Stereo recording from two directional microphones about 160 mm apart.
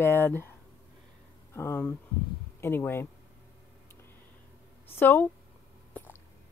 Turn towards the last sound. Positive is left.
turn(degrees=10)  # may be behind; listen again after turning